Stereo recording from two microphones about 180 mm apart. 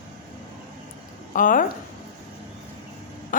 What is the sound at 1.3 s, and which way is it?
Speech, 50° left (ahead or behind).